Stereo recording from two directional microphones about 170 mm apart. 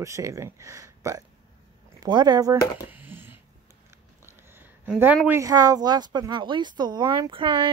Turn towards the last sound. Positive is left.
turn(degrees=-30)  # may be behind; listen again after turning